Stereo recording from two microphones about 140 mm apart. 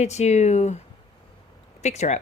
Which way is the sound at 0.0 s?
55° left (ahead or behind).